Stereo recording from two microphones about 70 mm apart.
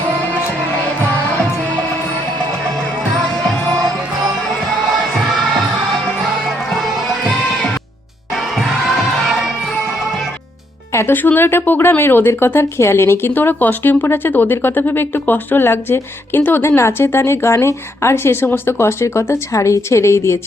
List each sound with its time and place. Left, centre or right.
10.9 s speech: left